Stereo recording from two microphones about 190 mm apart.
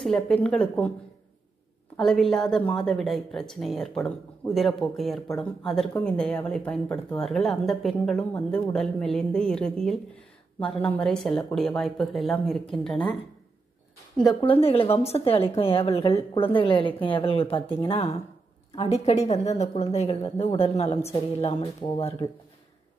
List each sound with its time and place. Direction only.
0.0 s speech: 5° left (ahead or behind)
2.0 s speech: centre (ahead or behind)
14.2 s a woman's voice: 30° left (ahead or behind)